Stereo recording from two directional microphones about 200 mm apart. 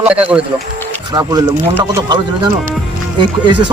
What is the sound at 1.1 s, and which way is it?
Speech, 20° right (ahead or behind).